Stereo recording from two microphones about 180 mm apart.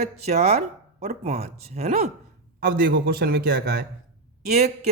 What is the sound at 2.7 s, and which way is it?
A man's voice, 65° right (ahead or behind).